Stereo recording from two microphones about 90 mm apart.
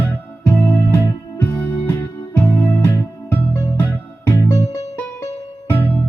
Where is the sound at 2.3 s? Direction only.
20° left (ahead or behind).